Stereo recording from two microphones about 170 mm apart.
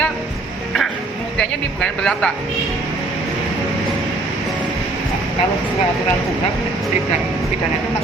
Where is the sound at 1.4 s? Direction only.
5° left (ahead or behind).